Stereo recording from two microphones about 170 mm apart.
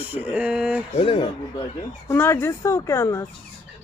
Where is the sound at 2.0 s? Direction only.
15° left (ahead or behind).